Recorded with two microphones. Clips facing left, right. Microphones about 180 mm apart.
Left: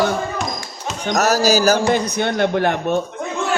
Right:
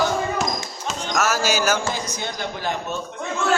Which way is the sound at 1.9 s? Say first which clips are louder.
Left 10 dB; 65° left (ahead or behind).